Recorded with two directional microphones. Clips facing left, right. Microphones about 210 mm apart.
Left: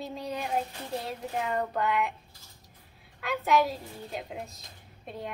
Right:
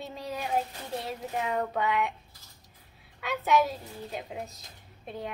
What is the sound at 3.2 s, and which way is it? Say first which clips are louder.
A woman's voice: even; centre (ahead or behind).